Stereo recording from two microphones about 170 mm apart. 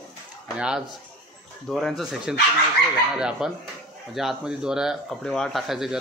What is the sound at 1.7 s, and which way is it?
Speech, centre (ahead or behind).